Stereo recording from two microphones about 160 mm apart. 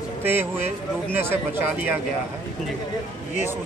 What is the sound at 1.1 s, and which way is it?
Speech, 15° right (ahead or behind).